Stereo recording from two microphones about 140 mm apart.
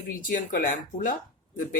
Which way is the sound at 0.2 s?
70° left (ahead or behind).